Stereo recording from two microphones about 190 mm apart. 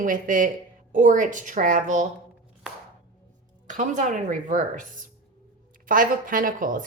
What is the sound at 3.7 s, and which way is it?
A woman's voice, 40° right (ahead or behind).